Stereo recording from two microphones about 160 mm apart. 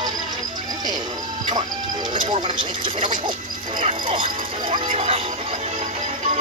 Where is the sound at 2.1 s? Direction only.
35° right (ahead or behind).